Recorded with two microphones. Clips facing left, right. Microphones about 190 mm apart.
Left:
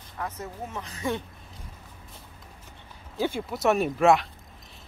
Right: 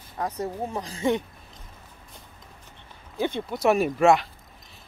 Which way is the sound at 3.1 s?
Centre (ahead or behind).